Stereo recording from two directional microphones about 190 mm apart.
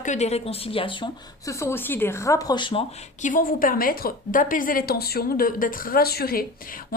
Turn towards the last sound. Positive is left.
turn(degrees=50)  # may be behind; listen again after turning